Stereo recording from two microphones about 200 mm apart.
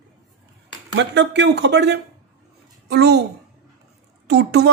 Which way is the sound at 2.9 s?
55° right (ahead or behind).